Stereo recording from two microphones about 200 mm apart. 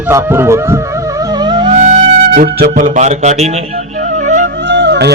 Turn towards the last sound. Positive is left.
turn(degrees=-55)  # may be behind; listen again after turning